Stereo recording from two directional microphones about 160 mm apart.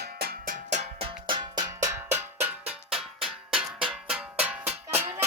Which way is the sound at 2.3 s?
10° right (ahead or behind).